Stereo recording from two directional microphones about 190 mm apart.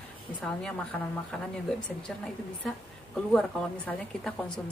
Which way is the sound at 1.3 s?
5° left (ahead or behind).